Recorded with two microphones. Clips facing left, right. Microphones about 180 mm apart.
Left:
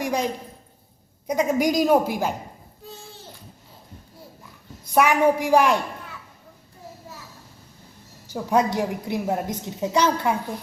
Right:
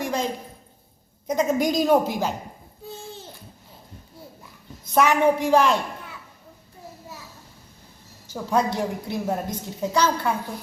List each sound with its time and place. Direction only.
0.0 s a sound: 15° left (ahead or behind)
1.3 s a woman's voice: 10° left (ahead or behind)
4.9 s a woman's voice: 10° left (ahead or behind)
8.3 s a woman's voice: 15° left (ahead or behind)